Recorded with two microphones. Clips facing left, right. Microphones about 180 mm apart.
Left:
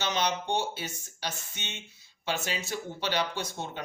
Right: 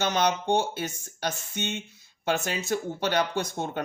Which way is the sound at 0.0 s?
50° right (ahead or behind).